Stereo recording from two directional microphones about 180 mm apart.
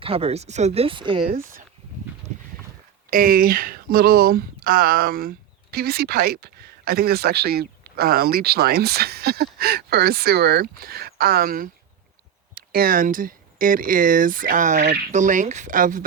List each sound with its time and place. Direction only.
0.0 s speech: 30° right (ahead or behind)
3.1 s speech: 50° right (ahead or behind)